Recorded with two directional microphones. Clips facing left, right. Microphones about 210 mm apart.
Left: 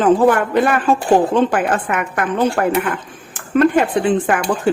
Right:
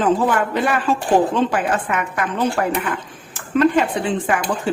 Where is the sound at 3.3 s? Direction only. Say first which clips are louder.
Left 2 dB; 50° left (ahead or behind).